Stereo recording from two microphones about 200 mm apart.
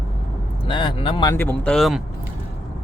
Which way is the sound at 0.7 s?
25° left (ahead or behind).